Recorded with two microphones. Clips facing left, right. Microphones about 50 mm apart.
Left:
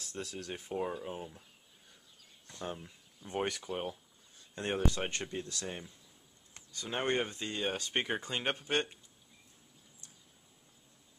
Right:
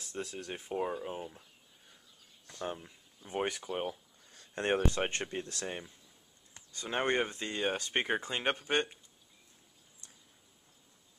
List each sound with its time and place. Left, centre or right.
0.0 s speech: centre
2.6 s speech: centre
4.6 s speech: right; by 9.0 s centre